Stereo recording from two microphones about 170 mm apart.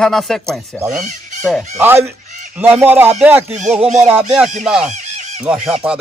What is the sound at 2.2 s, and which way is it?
Fowl, 45° right (ahead or behind).